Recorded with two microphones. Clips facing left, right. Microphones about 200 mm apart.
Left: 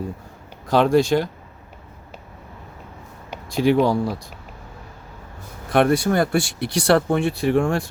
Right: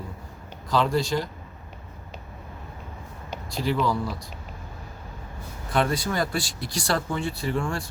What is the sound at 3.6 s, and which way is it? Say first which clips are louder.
Speech: left 8 dB; 65° left (ahead or behind).